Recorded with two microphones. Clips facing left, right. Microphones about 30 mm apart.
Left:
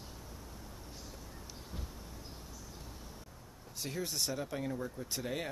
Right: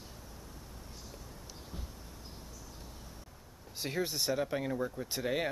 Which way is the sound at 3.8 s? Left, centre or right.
Right.